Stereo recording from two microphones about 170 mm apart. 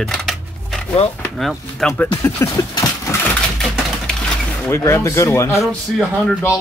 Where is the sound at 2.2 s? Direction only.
20° left (ahead or behind).